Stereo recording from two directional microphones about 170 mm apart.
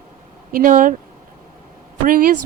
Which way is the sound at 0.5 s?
55° right (ahead or behind).